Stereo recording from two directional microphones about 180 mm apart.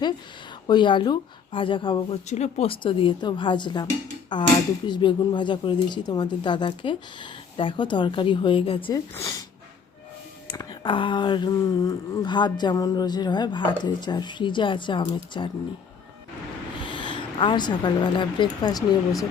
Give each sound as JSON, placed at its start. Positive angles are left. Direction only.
{"t": 0.7, "sound": "speech", "side_deg": 25}
{"t": 9.1, "sound": "speech", "side_deg": 20}
{"t": 10.5, "sound": "speech", "side_deg": 20}
{"t": 16.8, "sound": "speech", "side_deg": 30}